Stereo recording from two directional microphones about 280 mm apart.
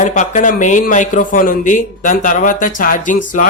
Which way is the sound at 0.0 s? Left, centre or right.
Left.